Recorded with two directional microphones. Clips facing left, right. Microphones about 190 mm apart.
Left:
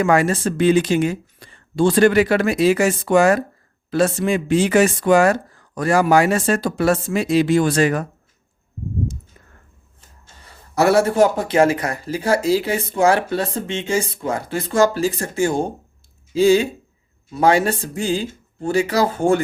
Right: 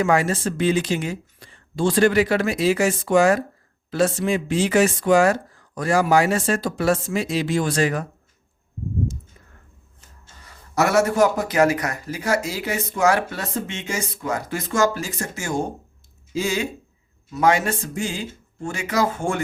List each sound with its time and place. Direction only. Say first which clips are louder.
0.0 s speech: left 3 dB; 60° left (ahead or behind)
10.4 s speech: left 4 dB; 30° left (ahead or behind)